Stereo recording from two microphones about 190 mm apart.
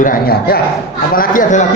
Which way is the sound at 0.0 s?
50° left (ahead or behind).